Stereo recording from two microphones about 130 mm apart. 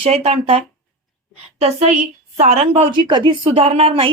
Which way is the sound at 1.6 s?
60° right (ahead or behind).